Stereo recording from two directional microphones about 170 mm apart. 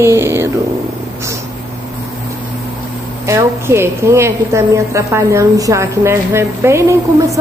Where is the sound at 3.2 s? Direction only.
15° right (ahead or behind).